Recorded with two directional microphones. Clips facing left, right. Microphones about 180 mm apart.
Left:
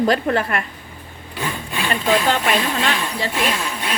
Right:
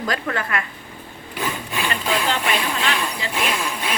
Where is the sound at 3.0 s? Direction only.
Centre (ahead or behind).